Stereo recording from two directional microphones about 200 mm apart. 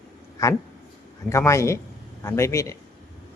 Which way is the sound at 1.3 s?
15° left (ahead or behind).